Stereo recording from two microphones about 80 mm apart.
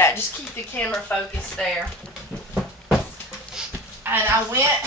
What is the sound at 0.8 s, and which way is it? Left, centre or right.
Speech, centre.